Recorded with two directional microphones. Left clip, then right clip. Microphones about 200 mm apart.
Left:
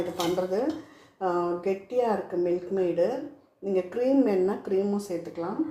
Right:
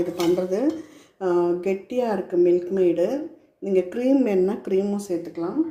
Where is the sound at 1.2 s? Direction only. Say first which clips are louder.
Right 5 dB; 50° right (ahead or behind).